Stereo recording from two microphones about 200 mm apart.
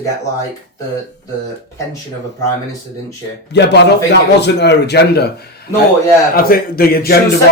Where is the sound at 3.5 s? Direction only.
60° left (ahead or behind).